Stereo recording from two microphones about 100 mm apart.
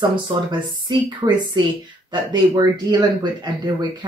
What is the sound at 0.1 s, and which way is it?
Speech, 50° right (ahead or behind).